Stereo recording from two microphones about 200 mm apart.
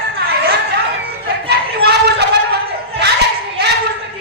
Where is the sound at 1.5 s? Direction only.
55° right (ahead or behind).